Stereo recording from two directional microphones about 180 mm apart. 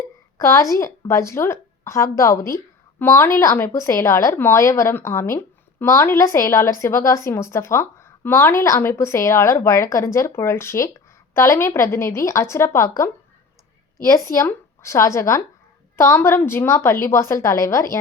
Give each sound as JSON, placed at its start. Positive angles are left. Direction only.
{"t": 0.3, "sound": "a woman's voice", "side_deg": 15}